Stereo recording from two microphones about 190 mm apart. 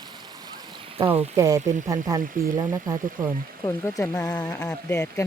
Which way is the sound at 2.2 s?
45° right (ahead or behind).